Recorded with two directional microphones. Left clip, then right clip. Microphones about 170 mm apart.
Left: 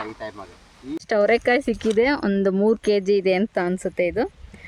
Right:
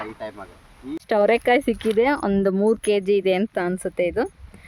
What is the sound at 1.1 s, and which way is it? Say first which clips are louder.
Speech: right 1 dB; 30° right (ahead or behind).